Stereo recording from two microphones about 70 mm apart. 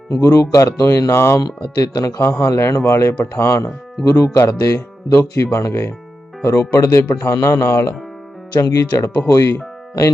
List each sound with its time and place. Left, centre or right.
0.1 s speech: left
1.1 s speech: left
1.4 s speech: left
2.4 s speech: left
8.6 s speech: left